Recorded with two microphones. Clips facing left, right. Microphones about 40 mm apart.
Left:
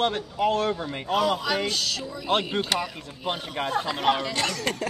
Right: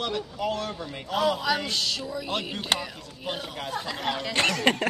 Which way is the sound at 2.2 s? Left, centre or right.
Left.